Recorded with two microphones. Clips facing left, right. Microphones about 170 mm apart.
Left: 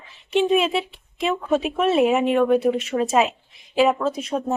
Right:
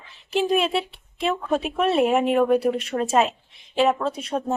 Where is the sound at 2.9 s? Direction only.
20° right (ahead or behind).